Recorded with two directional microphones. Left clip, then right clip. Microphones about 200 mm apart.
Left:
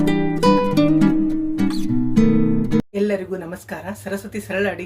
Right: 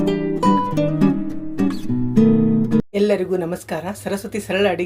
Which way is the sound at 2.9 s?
30° right (ahead or behind).